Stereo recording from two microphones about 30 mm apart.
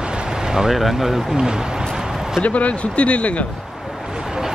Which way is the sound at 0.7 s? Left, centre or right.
Centre.